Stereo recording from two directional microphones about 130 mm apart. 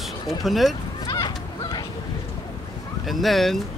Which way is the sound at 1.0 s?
30° left (ahead or behind).